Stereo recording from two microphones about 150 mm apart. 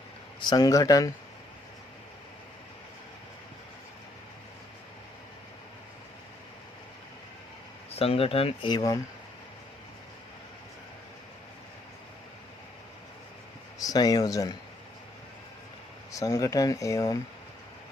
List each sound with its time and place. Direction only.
0.3 s speech: 30° left (ahead or behind)
7.9 s speech: 40° left (ahead or behind)
8.7 s speech: 25° left (ahead or behind)
13.7 s speech: 25° left (ahead or behind)
16.1 s speech: 20° left (ahead or behind)